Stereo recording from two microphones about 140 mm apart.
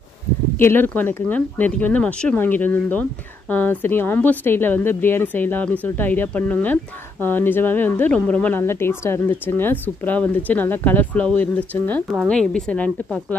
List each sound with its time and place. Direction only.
0.6 s speech: 15° left (ahead or behind)